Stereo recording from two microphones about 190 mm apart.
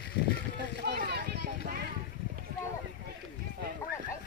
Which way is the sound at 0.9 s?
60° right (ahead or behind).